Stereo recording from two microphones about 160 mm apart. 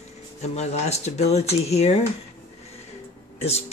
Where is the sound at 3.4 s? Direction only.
40° left (ahead or behind).